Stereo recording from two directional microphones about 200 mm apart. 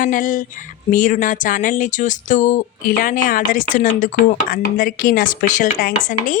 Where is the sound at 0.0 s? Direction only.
40° left (ahead or behind).